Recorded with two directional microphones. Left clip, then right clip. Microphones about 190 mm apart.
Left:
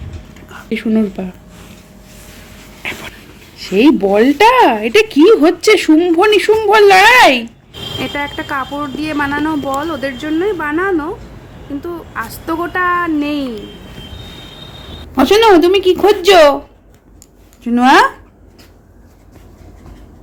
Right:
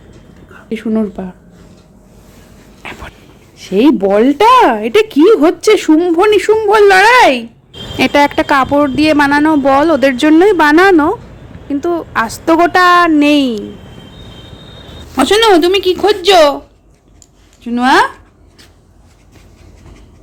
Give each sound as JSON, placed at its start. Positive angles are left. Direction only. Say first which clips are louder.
{"t": 0.7, "sound": "speech", "louder": "even", "side_deg": 0}
{"t": 2.8, "sound": "a sound", "louder": "left 4 dB", "side_deg": 0}
{"t": 3.6, "sound": "speech", "louder": "even", "side_deg": -10}
{"t": 7.9, "sound": "speech", "louder": "right 11 dB", "side_deg": -40}
{"t": 15.1, "sound": "speech", "louder": "even", "side_deg": 0}
{"t": 17.6, "sound": "speech", "louder": "left 1 dB", "side_deg": 5}